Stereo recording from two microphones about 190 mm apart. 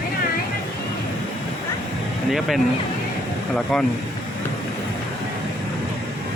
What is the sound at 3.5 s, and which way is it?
Speech, 5° left (ahead or behind).